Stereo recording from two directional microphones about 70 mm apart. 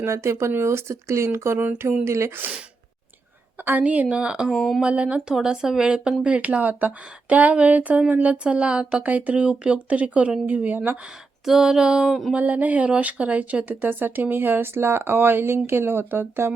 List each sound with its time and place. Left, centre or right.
0.0 s speech: right
2.0 s speech: right
3.6 s a woman's voice: right
4.5 s speech: centre
4.8 s a woman's voice: centre
11.4 s a woman's voice: centre
12.3 s speech: right